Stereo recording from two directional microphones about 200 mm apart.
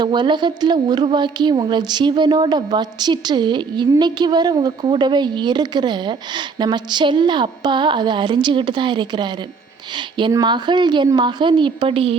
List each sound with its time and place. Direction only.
0.0 s a woman's voice: 20° right (ahead or behind)